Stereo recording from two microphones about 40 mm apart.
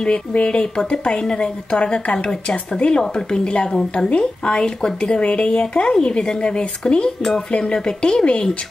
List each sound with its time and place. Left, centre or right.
0.3 s speech: left